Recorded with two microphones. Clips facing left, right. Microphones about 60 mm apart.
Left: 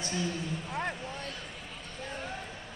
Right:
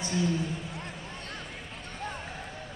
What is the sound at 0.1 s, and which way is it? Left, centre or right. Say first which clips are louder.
Speech: right 5 dB; centre.